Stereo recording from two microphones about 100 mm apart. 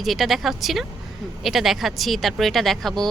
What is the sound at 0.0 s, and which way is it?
Speech, centre (ahead or behind).